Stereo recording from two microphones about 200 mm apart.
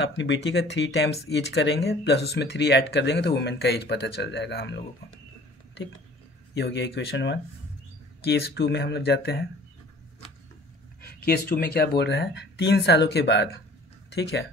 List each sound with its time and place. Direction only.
0.0 s speech: 65° left (ahead or behind)
6.5 s speech: 60° left (ahead or behind)
11.0 s speech: 50° left (ahead or behind)